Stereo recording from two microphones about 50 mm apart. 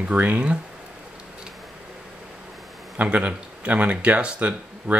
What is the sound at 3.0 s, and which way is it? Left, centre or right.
Speech, right.